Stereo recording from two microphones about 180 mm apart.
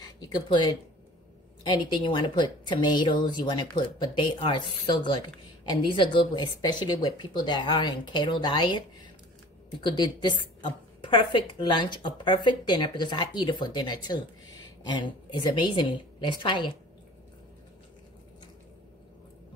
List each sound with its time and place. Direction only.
0.0 s a woman's voice: 25° left (ahead or behind)